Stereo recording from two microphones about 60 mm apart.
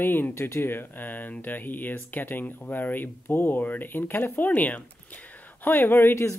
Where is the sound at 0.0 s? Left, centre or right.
Left.